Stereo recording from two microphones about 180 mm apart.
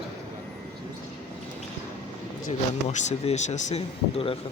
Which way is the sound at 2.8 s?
40° left (ahead or behind).